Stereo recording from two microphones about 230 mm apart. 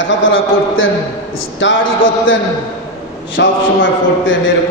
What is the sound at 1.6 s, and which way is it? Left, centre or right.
Speech, left.